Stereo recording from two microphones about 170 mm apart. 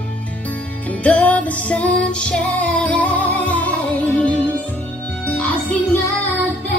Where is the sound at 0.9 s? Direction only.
10° left (ahead or behind).